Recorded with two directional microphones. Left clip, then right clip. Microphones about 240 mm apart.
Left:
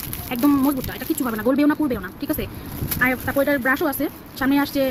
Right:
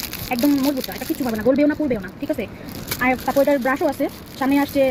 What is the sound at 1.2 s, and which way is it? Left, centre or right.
Speech, centre.